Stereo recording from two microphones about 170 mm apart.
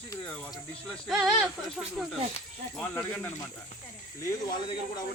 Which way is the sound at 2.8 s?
15° left (ahead or behind).